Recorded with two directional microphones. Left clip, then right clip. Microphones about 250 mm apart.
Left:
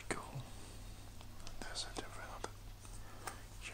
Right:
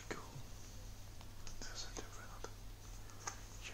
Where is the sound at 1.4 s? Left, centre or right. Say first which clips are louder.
Left 5 dB; left.